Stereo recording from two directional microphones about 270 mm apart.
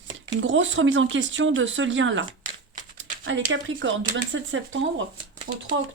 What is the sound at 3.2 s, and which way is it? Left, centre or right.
Speech, right.